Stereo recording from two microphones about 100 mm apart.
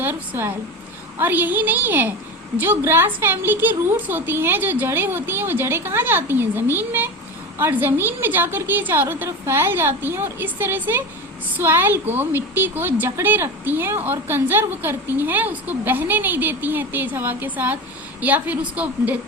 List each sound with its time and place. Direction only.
0.0 s a woman's voice: 20° right (ahead or behind)